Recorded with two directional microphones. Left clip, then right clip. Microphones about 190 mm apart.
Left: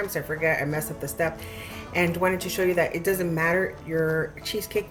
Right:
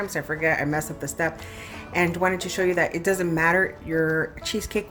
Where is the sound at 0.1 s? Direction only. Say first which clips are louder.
Right 3 dB; 25° right (ahead or behind).